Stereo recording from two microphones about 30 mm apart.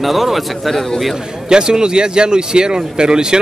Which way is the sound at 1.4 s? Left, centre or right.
Right.